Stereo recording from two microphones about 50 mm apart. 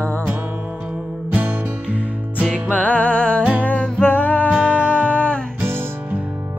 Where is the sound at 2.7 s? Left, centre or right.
Left.